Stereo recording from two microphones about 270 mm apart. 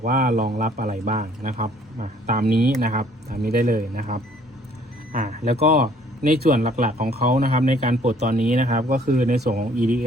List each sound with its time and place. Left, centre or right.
0.0 s speech: right